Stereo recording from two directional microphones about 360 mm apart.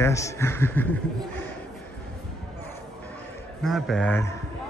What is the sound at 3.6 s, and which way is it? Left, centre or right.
Speech, centre.